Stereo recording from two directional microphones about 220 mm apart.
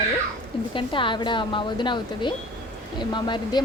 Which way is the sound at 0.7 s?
20° left (ahead or behind).